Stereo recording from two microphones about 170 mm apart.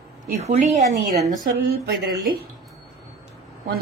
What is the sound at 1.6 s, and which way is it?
Speech, 65° right (ahead or behind).